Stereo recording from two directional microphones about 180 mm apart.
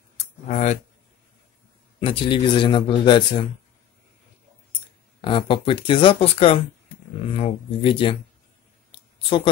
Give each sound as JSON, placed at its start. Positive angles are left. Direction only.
{"t": 0.5, "sound": "speech", "side_deg": 40}
{"t": 2.0, "sound": "speech", "side_deg": 30}
{"t": 5.2, "sound": "speech", "side_deg": 30}
{"t": 8.9, "sound": "a sound", "side_deg": 30}